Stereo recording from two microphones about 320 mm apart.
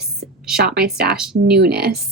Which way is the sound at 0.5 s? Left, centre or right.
Right.